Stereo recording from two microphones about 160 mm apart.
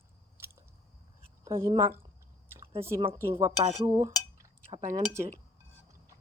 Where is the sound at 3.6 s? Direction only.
35° right (ahead or behind).